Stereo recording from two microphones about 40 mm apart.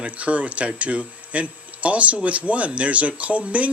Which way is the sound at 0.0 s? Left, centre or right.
Right.